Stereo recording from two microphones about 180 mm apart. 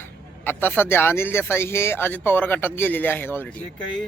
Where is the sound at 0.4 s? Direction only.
10° left (ahead or behind).